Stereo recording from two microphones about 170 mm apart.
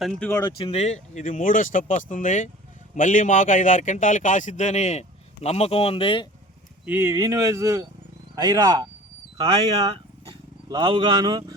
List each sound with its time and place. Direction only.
0.0 s speech: 5° left (ahead or behind)
0.3 s speech: 30° left (ahead or behind)
6.8 s speech: 15° right (ahead or behind)
9.4 s speech: 35° right (ahead or behind)